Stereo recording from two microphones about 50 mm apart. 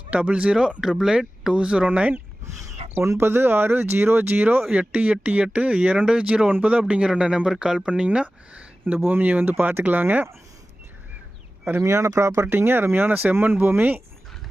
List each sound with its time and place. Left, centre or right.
0.1 s speech: right
0.8 s speech: centre
1.5 s speech: right
3.0 s speech: right
4.7 s speech: right
9.0 s speech: right
11.9 s speech: right
12.5 s speech: right
13.3 s speech: right